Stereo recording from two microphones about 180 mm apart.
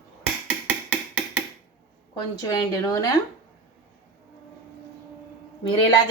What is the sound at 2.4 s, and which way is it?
Speech, 20° left (ahead or behind).